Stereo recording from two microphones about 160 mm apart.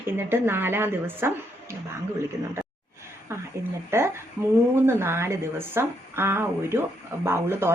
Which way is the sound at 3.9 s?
15° right (ahead or behind).